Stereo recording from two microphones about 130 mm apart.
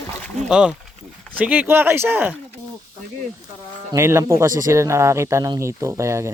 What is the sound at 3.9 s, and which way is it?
Speech, 20° right (ahead or behind).